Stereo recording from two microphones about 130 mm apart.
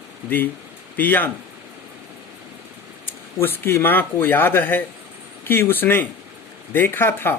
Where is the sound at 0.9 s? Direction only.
15° left (ahead or behind).